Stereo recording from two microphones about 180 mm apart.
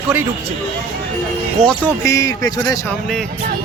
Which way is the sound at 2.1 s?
20° left (ahead or behind).